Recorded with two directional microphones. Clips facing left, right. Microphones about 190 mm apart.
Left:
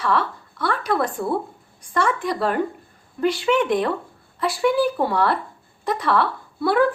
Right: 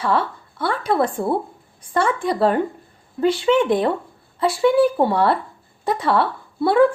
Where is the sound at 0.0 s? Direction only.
25° right (ahead or behind).